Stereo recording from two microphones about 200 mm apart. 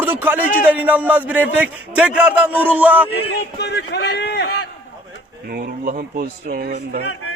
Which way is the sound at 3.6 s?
55° left (ahead or behind).